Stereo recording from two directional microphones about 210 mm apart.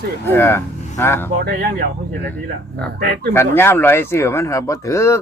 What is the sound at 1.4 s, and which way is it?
Speech, 50° right (ahead or behind).